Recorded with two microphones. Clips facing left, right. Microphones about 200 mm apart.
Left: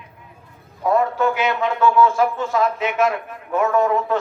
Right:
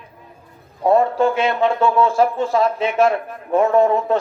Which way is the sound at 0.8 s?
30° right (ahead or behind).